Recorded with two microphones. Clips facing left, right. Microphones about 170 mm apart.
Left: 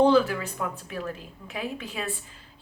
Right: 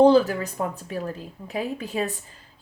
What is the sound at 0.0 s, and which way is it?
Speech, 40° right (ahead or behind).